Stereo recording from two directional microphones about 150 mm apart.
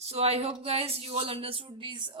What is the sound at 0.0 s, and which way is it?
Speech, 45° right (ahead or behind).